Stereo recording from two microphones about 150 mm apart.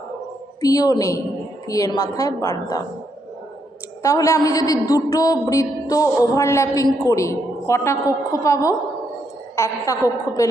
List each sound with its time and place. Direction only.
0.6 s speech: 25° left (ahead or behind)
4.0 s speech: 20° left (ahead or behind)